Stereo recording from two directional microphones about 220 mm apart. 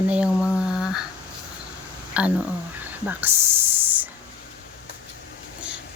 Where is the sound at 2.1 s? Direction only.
5° right (ahead or behind).